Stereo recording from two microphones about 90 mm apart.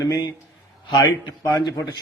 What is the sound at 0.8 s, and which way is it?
Speech, 60° left (ahead or behind).